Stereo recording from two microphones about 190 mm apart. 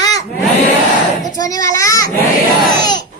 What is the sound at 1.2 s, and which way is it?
Speech, 20° left (ahead or behind).